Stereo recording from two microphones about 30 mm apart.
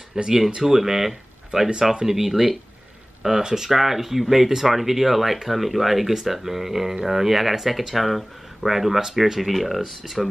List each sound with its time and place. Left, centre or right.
0.2 s speech: centre